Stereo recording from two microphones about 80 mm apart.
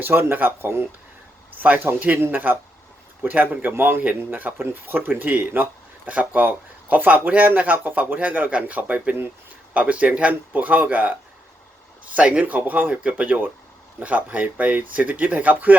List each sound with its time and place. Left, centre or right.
0.0 s speech: right
12.1 s speech: centre